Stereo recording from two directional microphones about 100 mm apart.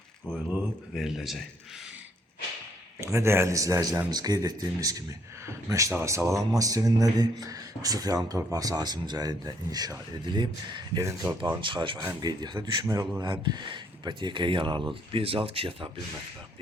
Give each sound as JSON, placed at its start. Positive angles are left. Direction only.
{"t": 0.9, "sound": "speech", "side_deg": -5}
{"t": 3.0, "sound": "speech", "side_deg": -30}
{"t": 11.0, "sound": "speech", "side_deg": -35}
{"t": 11.6, "sound": "speech", "side_deg": -55}
{"t": 13.2, "sound": "speech", "side_deg": -50}
{"t": 15.1, "sound": "speech", "side_deg": -70}